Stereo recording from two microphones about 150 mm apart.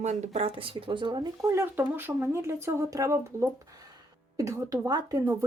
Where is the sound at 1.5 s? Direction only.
15° right (ahead or behind).